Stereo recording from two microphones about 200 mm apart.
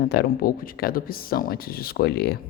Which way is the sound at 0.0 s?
50° left (ahead or behind).